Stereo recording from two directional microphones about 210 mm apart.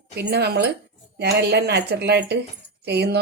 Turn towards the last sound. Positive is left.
turn(degrees=-50)  # may be behind; listen again after turning